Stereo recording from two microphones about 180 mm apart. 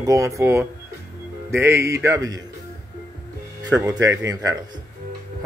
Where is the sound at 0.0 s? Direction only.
15° right (ahead or behind).